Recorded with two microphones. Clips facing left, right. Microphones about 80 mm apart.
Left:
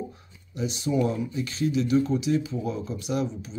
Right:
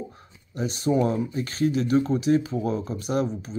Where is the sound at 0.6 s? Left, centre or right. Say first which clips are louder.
Right 3 dB; right.